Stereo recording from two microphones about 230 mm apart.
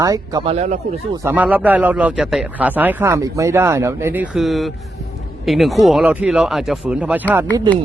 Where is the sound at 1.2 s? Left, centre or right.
Centre.